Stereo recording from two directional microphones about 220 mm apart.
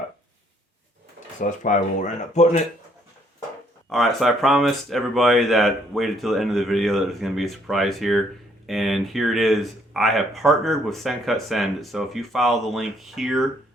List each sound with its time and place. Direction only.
1.4 s speech: 35° left (ahead or behind)
3.8 s speech: centre (ahead or behind)